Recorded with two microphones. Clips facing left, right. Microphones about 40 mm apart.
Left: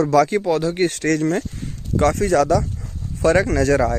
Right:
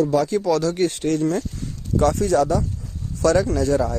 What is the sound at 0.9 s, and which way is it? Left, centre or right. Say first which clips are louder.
Speech: left 2 dB; left.